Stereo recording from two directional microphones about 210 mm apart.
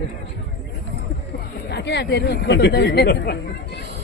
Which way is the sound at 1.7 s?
55° left (ahead or behind).